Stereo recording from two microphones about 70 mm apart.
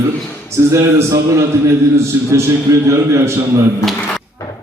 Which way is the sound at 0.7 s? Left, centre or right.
Right.